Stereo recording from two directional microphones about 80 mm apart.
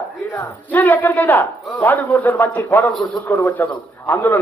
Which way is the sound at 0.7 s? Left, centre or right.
Left.